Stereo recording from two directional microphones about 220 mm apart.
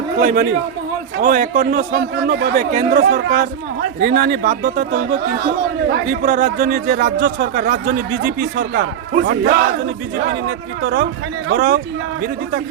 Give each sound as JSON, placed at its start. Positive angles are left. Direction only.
{"t": 0.2, "sound": "a man's voice", "side_deg": -40}